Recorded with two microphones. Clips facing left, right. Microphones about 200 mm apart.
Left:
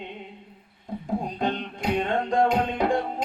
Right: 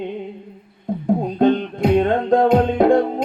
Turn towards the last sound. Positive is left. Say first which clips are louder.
# right 10 dB
turn(degrees=-55)  # may be behind; listen again after turning